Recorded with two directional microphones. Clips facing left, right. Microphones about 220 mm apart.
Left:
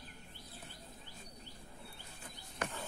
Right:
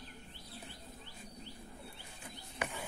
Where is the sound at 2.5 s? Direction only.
10° right (ahead or behind).